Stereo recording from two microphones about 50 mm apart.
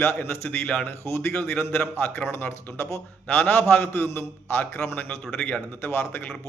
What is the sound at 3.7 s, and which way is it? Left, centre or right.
A man's voice, left.